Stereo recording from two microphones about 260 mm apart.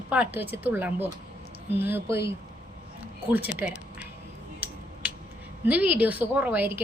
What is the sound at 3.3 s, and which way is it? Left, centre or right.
Speech, centre.